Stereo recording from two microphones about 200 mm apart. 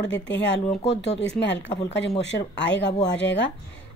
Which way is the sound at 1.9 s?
60° left (ahead or behind).